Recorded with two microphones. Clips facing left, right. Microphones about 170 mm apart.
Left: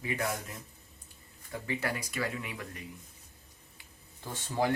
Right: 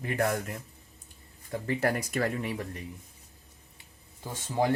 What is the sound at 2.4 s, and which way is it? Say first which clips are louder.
Speech: right 7 dB; 35° right (ahead or behind).